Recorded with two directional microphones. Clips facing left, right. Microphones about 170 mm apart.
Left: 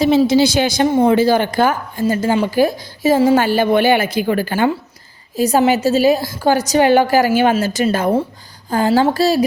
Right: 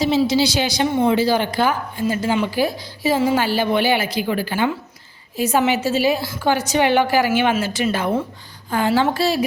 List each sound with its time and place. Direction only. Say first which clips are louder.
0.0 s a woman's voice: left 5 dB; 50° left (ahead or behind)